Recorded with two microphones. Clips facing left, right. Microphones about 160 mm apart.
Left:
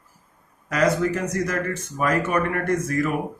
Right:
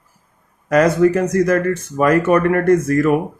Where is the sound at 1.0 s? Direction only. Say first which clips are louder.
Right 10 dB; 50° right (ahead or behind).